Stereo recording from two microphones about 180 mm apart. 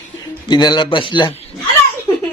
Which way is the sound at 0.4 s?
25° left (ahead or behind).